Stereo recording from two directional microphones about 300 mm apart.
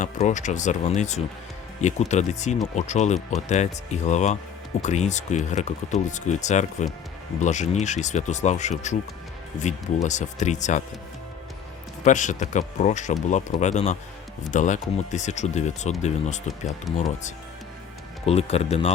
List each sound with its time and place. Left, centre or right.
0.0 s speech: left
12.0 s speech: left
16.9 s speech: centre
18.3 s speech: left